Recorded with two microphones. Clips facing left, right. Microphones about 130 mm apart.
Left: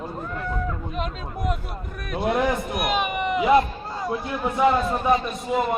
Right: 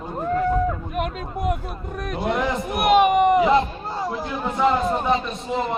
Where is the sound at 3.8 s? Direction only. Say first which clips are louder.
Right 1 dB; 25° right (ahead or behind).